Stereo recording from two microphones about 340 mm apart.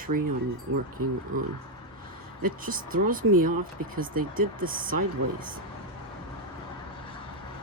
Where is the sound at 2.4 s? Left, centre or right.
Right.